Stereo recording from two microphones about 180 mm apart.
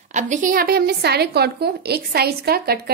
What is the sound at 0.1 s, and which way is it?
A woman's voice, 45° right (ahead or behind).